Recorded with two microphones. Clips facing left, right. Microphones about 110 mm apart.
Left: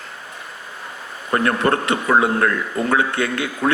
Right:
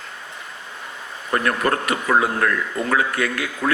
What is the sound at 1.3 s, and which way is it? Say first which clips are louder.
A man's voice: left 3 dB; 30° left (ahead or behind).